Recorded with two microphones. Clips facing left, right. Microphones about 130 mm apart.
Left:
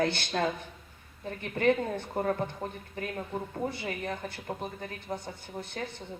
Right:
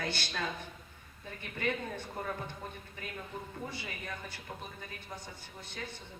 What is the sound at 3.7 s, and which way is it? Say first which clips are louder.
A woman's voice: left 8 dB; 55° left (ahead or behind).